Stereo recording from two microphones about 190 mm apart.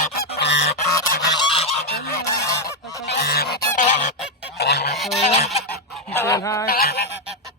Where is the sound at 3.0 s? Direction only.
60° left (ahead or behind).